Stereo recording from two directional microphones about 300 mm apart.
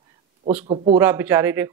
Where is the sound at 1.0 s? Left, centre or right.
Centre.